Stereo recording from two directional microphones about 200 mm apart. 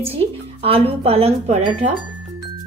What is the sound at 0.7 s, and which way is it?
Speech, 30° right (ahead or behind).